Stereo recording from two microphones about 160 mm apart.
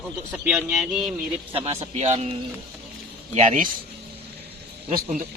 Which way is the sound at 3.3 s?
50° right (ahead or behind).